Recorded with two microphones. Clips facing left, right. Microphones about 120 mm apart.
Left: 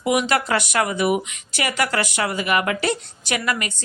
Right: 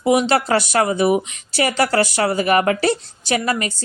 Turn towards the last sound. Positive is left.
turn(degrees=-35)  # may be behind; listen again after turning